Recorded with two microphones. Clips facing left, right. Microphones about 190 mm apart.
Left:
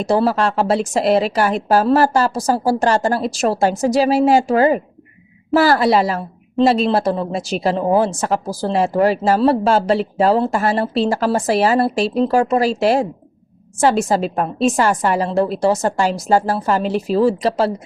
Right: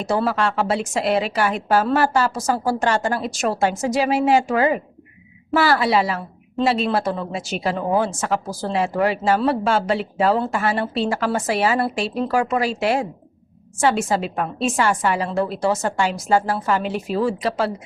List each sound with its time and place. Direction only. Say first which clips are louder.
0.0 s a woman's voice: left 4 dB; 35° left (ahead or behind)